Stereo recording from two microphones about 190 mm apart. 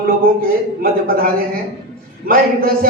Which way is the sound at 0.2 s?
50° right (ahead or behind).